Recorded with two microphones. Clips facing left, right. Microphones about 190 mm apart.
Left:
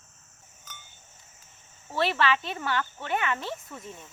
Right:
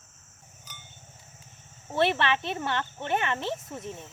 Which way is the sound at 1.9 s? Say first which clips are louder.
Right 1 dB; 20° right (ahead or behind).